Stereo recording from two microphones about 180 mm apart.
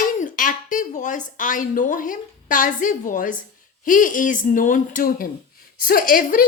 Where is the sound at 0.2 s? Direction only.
50° left (ahead or behind).